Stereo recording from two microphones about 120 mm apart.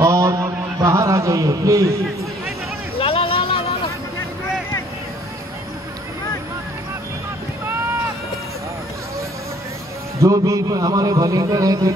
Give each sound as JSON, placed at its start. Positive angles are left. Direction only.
{"t": 0.0, "sound": "mantra", "side_deg": -30}
{"t": 3.0, "sound": "a sound", "side_deg": 50}
{"t": 10.2, "sound": "a man's voice", "side_deg": -25}